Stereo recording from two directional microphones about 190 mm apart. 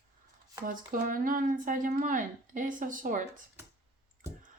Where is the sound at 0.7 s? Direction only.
45° right (ahead or behind).